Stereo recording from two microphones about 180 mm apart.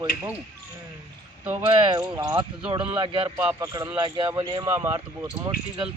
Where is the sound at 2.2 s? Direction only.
25° right (ahead or behind).